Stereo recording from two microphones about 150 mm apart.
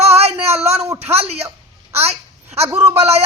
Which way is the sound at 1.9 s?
45° right (ahead or behind).